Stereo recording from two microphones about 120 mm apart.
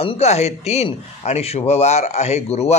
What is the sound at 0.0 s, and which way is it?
A man's voice, 60° left (ahead or behind).